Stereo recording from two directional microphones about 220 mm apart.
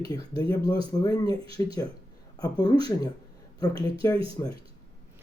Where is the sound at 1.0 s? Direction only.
15° left (ahead or behind).